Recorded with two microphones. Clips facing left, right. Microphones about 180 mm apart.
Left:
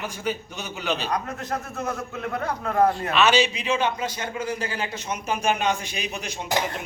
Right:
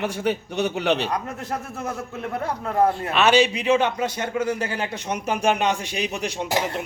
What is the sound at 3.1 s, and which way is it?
A man's voice, 55° right (ahead or behind).